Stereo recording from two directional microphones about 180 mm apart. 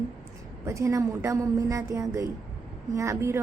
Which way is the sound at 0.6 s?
15° right (ahead or behind).